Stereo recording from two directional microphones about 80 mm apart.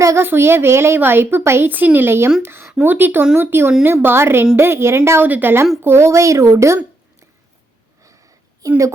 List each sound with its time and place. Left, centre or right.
0.0 s a woman's voice: right